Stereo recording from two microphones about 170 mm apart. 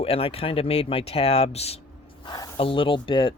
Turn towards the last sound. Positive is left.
turn(degrees=30)  # may be behind; listen again after turning